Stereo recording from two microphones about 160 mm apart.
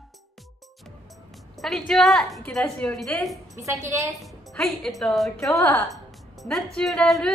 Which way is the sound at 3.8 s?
20° right (ahead or behind).